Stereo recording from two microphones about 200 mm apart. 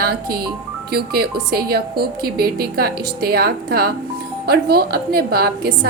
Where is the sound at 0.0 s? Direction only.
50° right (ahead or behind).